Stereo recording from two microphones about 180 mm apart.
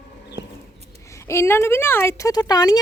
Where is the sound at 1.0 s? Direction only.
15° left (ahead or behind).